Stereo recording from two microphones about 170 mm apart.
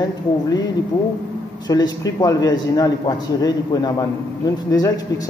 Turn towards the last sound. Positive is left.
turn(degrees=20)  # may be behind; listen again after turning